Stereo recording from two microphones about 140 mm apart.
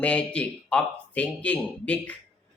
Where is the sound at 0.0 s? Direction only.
10° left (ahead or behind).